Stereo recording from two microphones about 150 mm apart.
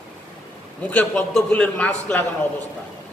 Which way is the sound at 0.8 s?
10° left (ahead or behind).